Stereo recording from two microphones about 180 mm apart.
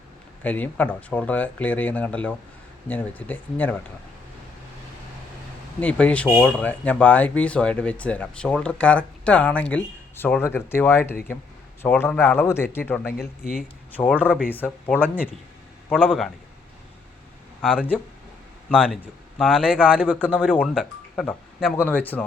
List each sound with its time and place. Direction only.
0.4 s speech: 10° left (ahead or behind)
5.8 s speech: 10° left (ahead or behind)
13.1 s speech: 55° left (ahead or behind)
13.9 s speech: 10° left (ahead or behind)
14.2 s speech: 5° right (ahead or behind)
14.5 s speech: 10° left (ahead or behind)
16.0 s speech: centre (ahead or behind)
17.6 s speech: 5° right (ahead or behind)
21.8 s speech: 10° left (ahead or behind)